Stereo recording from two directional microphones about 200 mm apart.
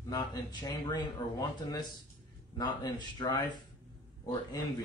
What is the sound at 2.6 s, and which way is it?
A man's voice, 20° left (ahead or behind).